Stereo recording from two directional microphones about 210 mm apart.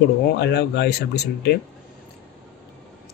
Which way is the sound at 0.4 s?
55° left (ahead or behind).